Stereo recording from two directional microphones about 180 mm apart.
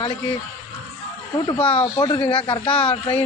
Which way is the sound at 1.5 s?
30° left (ahead or behind).